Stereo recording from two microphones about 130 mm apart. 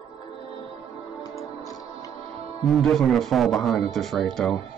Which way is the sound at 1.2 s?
25° left (ahead or behind).